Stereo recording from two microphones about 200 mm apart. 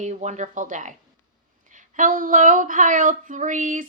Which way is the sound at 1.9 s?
45° right (ahead or behind).